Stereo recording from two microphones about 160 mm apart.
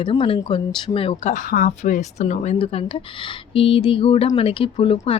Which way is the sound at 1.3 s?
55° left (ahead or behind).